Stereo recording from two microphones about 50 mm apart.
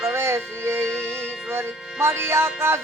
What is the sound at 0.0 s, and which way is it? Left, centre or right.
Music, right.